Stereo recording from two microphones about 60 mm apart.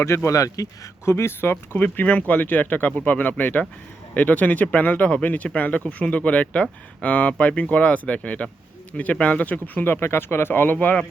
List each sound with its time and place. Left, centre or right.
0.0 s speech: left
1.0 s speech: left
9.8 s speech: left